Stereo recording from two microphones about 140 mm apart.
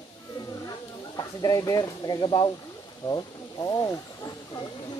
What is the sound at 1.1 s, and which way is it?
Speech, 25° left (ahead or behind).